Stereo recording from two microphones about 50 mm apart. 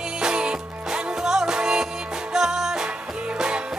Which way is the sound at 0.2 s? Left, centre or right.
Centre.